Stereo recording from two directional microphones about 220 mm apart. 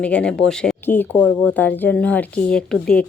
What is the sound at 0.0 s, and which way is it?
A woman's voice, 5° left (ahead or behind).